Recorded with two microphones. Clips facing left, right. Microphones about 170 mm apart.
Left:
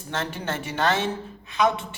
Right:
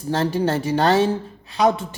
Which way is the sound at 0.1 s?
35° right (ahead or behind).